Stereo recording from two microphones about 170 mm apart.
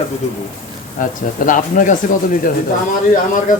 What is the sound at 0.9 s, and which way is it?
Speech, 50° left (ahead or behind).